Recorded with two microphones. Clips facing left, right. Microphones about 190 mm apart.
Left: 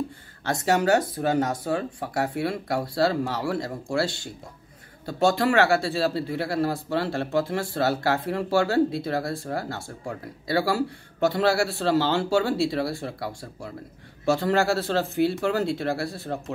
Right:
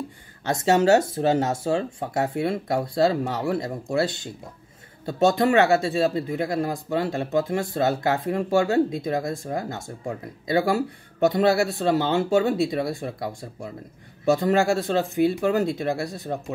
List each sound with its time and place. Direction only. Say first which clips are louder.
0.5 s speech: right 3 dB; 20° right (ahead or behind)